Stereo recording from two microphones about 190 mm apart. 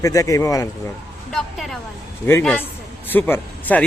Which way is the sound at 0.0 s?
15° left (ahead or behind).